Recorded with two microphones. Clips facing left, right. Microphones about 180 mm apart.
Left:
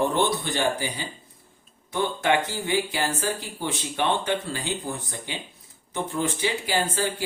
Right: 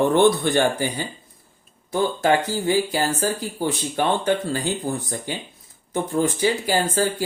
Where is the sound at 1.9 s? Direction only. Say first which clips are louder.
Right 4 dB; 35° right (ahead or behind).